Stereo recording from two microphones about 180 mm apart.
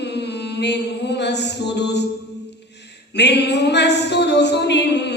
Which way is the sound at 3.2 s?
70° left (ahead or behind).